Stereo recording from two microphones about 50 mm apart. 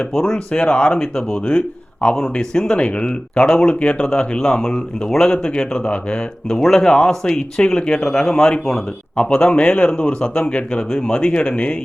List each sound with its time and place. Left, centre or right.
0.1 s speech: centre